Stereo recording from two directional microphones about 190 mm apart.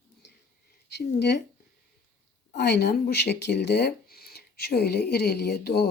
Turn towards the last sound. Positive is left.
turn(degrees=60)  # may be behind; listen again after turning